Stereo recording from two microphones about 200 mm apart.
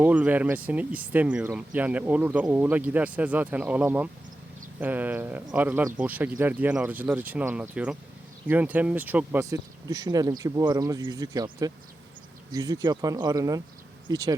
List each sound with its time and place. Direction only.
0.0 s speech: 10° right (ahead or behind)